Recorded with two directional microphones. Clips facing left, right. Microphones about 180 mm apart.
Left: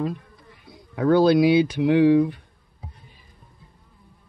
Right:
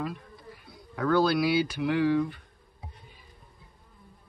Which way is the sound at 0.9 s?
30° left (ahead or behind).